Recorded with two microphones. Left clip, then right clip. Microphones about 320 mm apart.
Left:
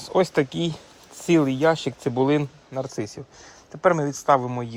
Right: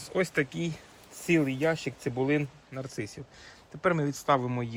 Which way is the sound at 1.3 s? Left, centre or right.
Left.